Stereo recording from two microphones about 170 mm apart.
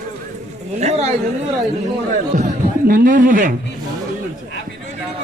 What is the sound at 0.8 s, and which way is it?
Speech, 40° right (ahead or behind).